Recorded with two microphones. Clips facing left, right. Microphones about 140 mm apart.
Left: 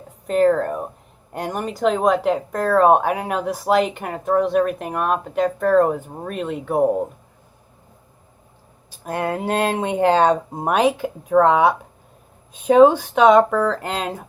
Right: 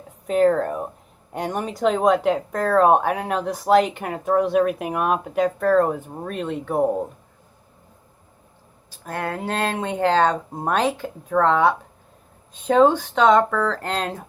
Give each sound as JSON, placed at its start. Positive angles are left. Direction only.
{"t": 0.3, "sound": "speech", "side_deg": 0}
{"t": 9.0, "sound": "speech", "side_deg": 20}